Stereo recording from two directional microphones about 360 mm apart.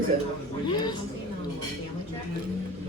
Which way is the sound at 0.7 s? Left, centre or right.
Centre.